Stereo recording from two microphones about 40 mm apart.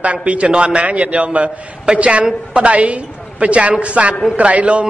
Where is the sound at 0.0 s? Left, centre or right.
Right.